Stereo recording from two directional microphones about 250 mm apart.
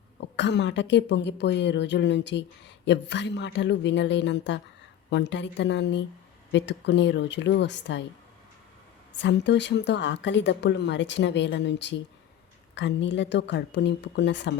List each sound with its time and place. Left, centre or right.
0.2 s a woman's voice: left
9.1 s a woman's voice: left